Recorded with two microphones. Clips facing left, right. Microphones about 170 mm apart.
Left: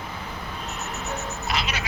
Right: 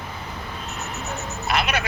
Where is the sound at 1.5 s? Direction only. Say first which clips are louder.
Right 6 dB; 55° right (ahead or behind).